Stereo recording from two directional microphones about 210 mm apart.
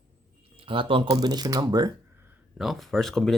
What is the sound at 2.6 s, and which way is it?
Speech, centre (ahead or behind).